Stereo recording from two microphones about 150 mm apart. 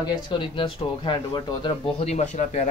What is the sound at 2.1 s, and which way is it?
Speech, 50° left (ahead or behind).